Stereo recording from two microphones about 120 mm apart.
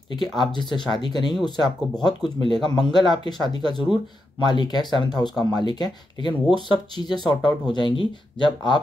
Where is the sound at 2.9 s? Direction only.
35° left (ahead or behind).